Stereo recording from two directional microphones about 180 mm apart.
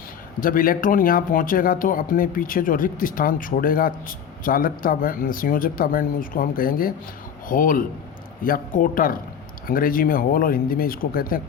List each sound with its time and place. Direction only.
0.3 s speech: 50° left (ahead or behind)